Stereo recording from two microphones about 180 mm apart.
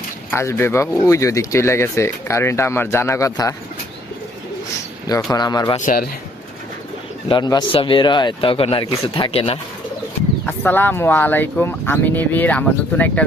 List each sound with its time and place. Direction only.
0.3 s speech: 15° left (ahead or behind)
5.0 s speech: 20° left (ahead or behind)
5.8 s a man's voice: 50° left (ahead or behind)
7.3 s speech: 25° left (ahead or behind)
10.4 s speech: 10° left (ahead or behind)